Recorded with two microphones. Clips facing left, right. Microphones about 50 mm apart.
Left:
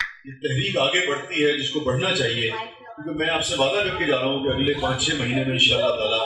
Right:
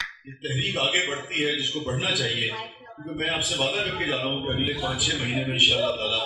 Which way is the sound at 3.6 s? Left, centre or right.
Left.